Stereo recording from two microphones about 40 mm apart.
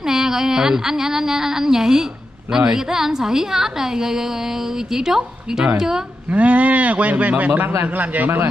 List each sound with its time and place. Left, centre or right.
0.0 s a sound: centre
6.3 s speech: right
7.6 s a man's voice: right